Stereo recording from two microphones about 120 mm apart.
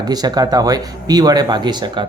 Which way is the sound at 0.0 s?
35° right (ahead or behind).